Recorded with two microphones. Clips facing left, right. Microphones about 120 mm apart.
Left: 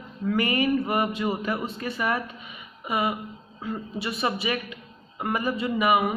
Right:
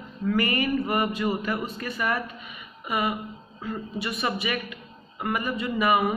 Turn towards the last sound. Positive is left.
turn(degrees=15)  # may be behind; listen again after turning